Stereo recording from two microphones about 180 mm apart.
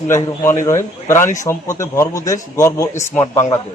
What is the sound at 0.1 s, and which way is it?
A man's voice, 15° left (ahead or behind).